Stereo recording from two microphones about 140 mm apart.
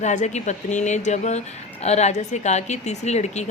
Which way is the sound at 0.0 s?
55° left (ahead or behind).